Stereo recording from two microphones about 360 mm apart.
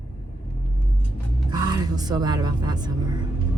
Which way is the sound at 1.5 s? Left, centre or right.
Centre.